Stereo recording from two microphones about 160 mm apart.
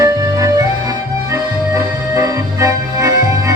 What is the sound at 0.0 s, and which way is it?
Music, 20° right (ahead or behind).